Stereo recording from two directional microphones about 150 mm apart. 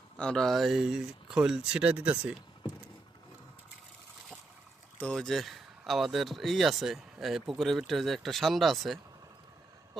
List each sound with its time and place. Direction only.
0.2 s speech: 5° left (ahead or behind)
4.9 s speech: 5° left (ahead or behind)